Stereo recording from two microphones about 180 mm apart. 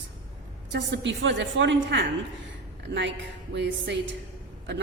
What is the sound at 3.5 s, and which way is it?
Speech, 85° right.